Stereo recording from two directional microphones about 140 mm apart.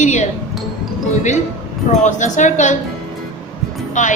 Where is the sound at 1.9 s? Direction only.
60° left (ahead or behind).